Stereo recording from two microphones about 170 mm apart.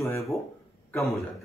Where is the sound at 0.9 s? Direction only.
Centre (ahead or behind).